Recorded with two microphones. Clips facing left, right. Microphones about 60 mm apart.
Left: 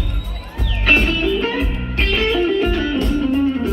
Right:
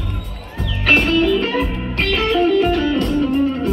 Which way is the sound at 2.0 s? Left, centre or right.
Centre.